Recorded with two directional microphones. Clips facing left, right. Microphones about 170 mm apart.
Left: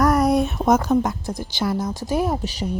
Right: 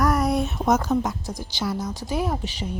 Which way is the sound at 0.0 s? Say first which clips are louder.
Left 4 dB; 45° left (ahead or behind).